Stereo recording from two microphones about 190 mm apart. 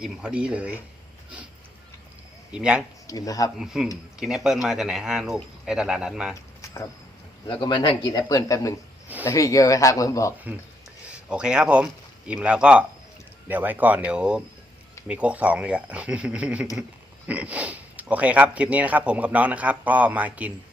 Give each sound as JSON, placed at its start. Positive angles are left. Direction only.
{"t": 0.0, "sound": "speech", "side_deg": -5}
{"t": 2.5, "sound": "speech", "side_deg": -5}
{"t": 3.1, "sound": "speech", "side_deg": 20}
{"t": 3.6, "sound": "speech", "side_deg": -5}
{"t": 7.4, "sound": "speech", "side_deg": 25}
{"t": 11.3, "sound": "speech", "side_deg": -5}